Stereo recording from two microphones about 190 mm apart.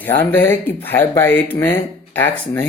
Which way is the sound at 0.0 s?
10° left (ahead or behind).